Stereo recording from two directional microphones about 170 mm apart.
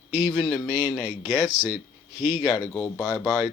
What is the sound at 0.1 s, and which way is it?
Speech, 5° right (ahead or behind).